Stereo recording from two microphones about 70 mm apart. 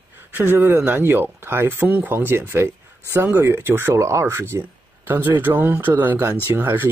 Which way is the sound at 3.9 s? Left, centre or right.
Right.